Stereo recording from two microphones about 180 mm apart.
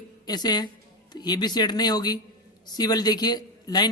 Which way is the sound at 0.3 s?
20° left (ahead or behind).